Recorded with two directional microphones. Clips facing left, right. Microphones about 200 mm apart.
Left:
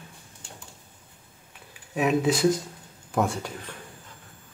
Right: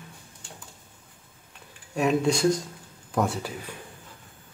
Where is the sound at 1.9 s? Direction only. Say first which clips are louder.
Even; centre (ahead or behind).